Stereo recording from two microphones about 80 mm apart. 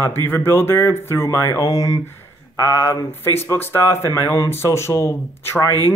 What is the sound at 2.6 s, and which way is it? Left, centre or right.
Speech, left.